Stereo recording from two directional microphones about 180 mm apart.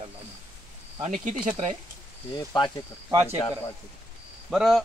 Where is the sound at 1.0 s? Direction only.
45° right (ahead or behind).